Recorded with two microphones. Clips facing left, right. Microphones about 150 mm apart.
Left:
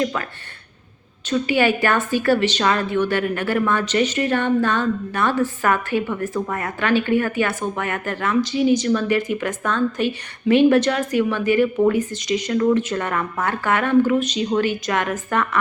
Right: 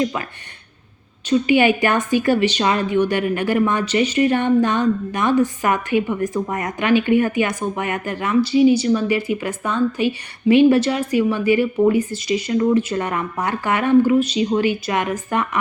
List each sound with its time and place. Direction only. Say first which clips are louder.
0.0 s speech: right 1 dB; 15° right (ahead or behind)
1.3 s speech: right 3 dB; 15° right (ahead or behind)